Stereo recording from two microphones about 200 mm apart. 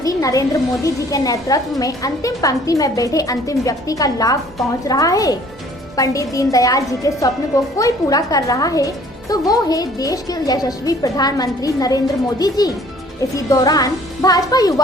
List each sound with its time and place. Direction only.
0.0 s a woman's voice: 15° left (ahead or behind)